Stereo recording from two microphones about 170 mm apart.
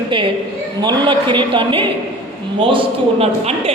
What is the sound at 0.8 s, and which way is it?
A woman's voice, 25° right (ahead or behind).